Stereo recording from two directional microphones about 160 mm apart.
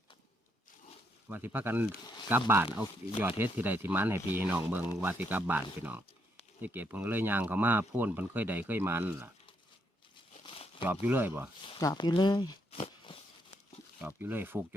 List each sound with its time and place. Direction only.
1.3 s speech: 10° right (ahead or behind)
10.4 s crumpling: 35° left (ahead or behind)
11.0 s speech: 10° right (ahead or behind)
11.8 s speech: 25° left (ahead or behind)
14.0 s speech: 10° right (ahead or behind)